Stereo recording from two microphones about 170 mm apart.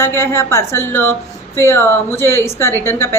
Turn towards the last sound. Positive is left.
turn(degrees=15)  # may be behind; listen again after turning